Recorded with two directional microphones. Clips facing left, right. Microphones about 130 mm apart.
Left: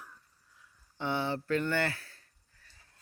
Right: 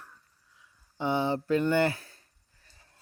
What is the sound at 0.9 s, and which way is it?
Speech, 15° right (ahead or behind).